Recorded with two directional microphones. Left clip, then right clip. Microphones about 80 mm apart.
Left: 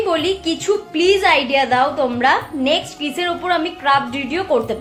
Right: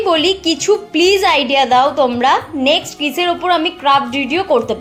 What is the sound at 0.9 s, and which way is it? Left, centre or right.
A woman's voice, right.